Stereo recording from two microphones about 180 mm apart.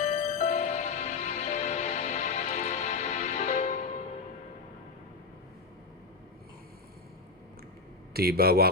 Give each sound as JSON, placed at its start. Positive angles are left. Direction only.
{"t": 0.0, "sound": "music", "side_deg": 40}
{"t": 8.1, "sound": "a man's voice", "side_deg": -60}